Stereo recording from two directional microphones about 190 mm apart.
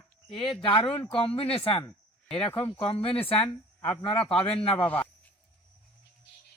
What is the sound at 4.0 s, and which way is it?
Speech, 30° left (ahead or behind).